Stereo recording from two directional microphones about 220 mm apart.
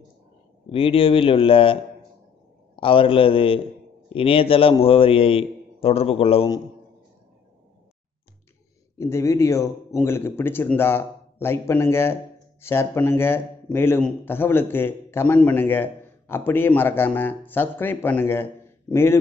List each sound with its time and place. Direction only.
0.7 s a man's voice: 25° left (ahead or behind)
8.9 s a man's voice: 15° left (ahead or behind)